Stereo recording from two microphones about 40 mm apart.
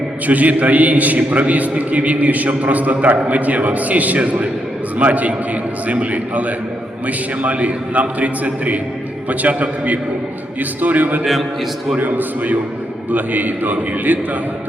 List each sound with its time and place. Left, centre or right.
0.3 s a man's voice: right